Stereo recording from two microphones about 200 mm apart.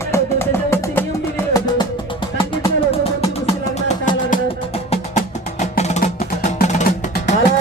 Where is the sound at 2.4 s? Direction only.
25° left (ahead or behind).